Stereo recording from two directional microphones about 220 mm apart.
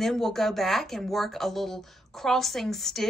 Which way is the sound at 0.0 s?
Centre (ahead or behind).